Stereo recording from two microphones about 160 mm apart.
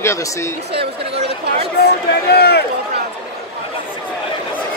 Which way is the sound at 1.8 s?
90° left.